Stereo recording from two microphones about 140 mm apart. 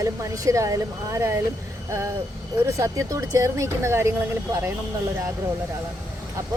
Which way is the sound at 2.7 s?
20° right (ahead or behind).